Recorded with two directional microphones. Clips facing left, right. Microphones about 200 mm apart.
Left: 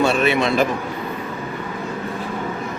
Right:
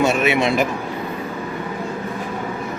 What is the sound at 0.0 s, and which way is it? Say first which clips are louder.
Speech: even; 20° right (ahead or behind).